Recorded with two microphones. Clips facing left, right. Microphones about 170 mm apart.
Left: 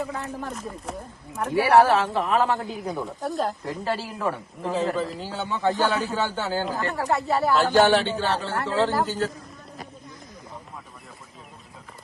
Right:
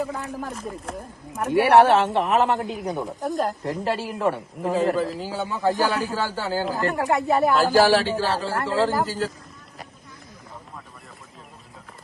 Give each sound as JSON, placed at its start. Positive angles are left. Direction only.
{"t": 0.0, "sound": "a man's voice", "side_deg": 0}
{"t": 1.8, "sound": "speech", "side_deg": -25}
{"t": 3.2, "sound": "a man's voice", "side_deg": 0}
{"t": 6.9, "sound": "speech", "side_deg": -15}
{"t": 7.5, "sound": "a man's voice", "side_deg": -5}